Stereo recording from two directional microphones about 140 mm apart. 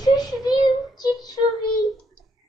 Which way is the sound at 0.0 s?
30° left (ahead or behind).